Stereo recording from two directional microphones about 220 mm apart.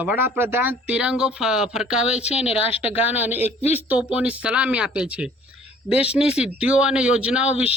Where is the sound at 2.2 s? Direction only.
30° left (ahead or behind).